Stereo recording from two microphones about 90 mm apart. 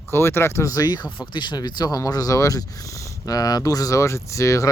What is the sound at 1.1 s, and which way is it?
Speech, 65° left (ahead or behind).